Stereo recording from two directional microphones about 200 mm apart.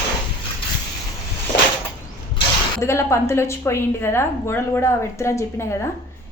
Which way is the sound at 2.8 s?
15° left (ahead or behind).